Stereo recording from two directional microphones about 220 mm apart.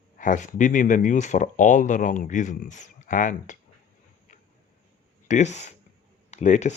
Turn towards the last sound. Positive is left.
turn(degrees=30)  # may be behind; listen again after turning